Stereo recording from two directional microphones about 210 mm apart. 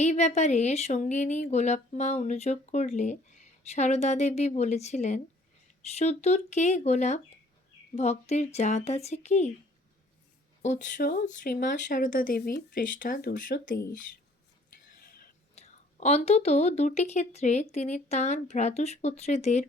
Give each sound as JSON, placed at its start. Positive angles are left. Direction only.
{"t": 0.0, "sound": "speech", "side_deg": 35}
{"t": 10.6, "sound": "speech", "side_deg": 35}
{"t": 15.5, "sound": "speech", "side_deg": 30}